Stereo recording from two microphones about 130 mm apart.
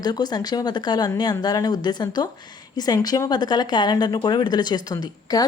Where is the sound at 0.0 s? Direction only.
30° left (ahead or behind).